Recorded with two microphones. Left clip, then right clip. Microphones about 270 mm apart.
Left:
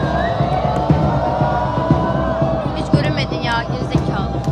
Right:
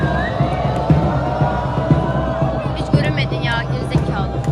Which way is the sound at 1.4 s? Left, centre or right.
Left.